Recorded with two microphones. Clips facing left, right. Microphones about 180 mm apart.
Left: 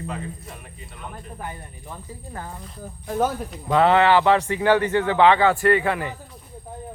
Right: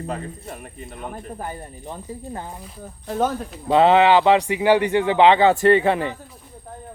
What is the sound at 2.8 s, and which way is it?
Speech, 10° left (ahead or behind).